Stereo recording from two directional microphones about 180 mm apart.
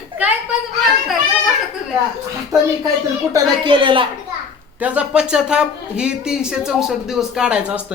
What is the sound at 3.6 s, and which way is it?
Speech, 25° right (ahead or behind).